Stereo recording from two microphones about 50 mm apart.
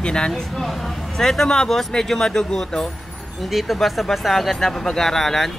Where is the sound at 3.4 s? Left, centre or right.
Centre.